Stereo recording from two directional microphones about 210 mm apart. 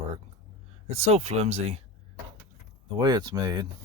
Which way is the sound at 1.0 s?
30° right (ahead or behind).